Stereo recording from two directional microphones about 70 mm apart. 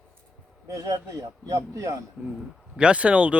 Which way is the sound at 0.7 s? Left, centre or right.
Right.